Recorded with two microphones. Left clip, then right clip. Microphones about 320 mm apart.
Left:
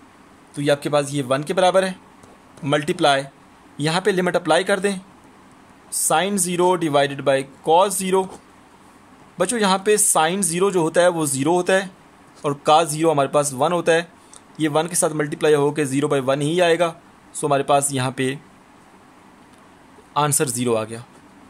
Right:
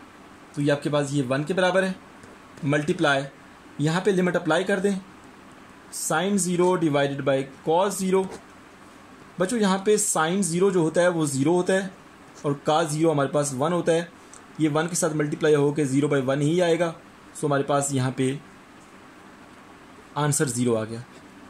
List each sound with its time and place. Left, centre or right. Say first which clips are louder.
0.6 s speech: left 5 dB; left
6.0 s speech: left 5 dB; left
9.4 s speech: left 5 dB; left
20.2 s speech: left 5 dB; left